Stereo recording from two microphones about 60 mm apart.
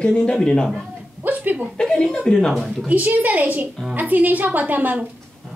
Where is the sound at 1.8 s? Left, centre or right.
Centre.